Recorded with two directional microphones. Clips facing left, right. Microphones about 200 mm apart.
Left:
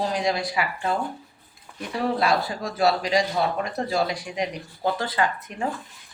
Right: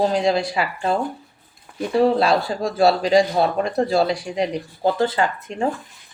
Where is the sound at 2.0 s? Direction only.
30° right (ahead or behind).